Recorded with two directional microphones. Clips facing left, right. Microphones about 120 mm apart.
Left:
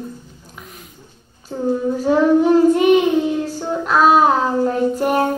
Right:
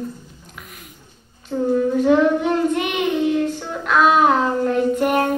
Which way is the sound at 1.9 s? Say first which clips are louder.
Left 3 dB; 35° left (ahead or behind).